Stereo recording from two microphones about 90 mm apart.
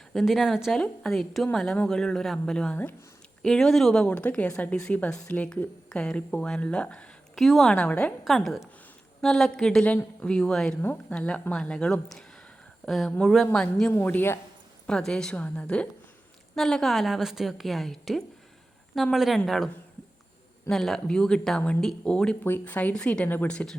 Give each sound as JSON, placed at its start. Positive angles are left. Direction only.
{"t": 0.1, "sound": "a woman's voice", "side_deg": 0}
{"t": 9.2, "sound": "a woman's voice", "side_deg": 5}
{"t": 10.8, "sound": "speech", "side_deg": 25}
{"t": 11.1, "sound": "a woman's voice", "side_deg": 15}
{"t": 13.5, "sound": "speech", "side_deg": 10}
{"t": 13.9, "sound": "speech", "side_deg": 25}
{"t": 14.8, "sound": "a woman's voice", "side_deg": 10}
{"t": 22.4, "sound": "speech", "side_deg": 20}